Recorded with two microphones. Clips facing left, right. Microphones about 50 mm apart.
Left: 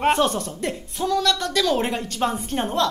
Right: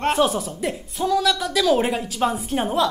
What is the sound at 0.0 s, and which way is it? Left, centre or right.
Speech, centre.